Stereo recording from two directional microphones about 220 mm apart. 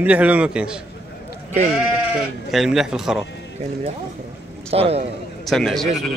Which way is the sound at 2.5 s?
Centre (ahead or behind).